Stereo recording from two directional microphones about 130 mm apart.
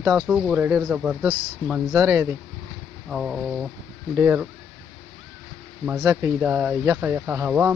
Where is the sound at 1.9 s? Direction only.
20° right (ahead or behind).